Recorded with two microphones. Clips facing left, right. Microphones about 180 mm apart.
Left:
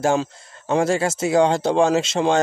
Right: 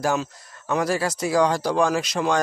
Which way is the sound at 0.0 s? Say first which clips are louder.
Left 4 dB; 25° left (ahead or behind).